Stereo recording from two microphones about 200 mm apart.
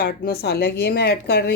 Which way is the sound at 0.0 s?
50° left (ahead or behind).